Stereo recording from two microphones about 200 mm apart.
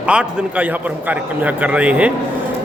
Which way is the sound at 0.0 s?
5° right (ahead or behind).